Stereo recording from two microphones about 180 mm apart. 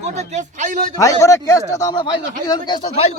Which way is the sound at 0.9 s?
20° left (ahead or behind).